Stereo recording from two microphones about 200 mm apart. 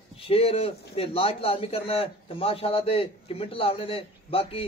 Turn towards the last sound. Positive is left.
turn(degrees=30)  # may be behind; listen again after turning